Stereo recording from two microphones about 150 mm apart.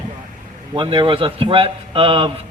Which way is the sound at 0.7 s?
30° right (ahead or behind).